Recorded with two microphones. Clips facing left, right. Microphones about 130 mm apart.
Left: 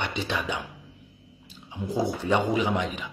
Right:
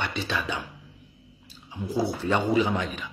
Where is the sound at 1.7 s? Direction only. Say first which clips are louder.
Even; 20° left (ahead or behind).